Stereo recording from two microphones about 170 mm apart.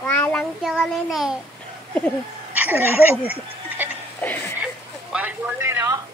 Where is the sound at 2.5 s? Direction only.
10° right (ahead or behind).